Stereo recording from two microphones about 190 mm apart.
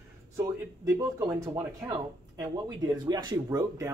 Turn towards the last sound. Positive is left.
turn(degrees=-15)  # may be behind; listen again after turning